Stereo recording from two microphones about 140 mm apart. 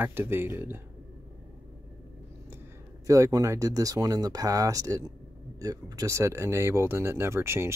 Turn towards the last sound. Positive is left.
turn(degrees=-20)  # may be behind; listen again after turning